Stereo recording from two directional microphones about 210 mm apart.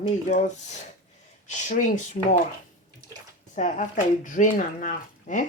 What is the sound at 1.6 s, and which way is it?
Speech, 35° left (ahead or behind).